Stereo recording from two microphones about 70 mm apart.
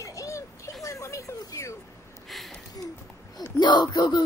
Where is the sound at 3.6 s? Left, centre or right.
Left.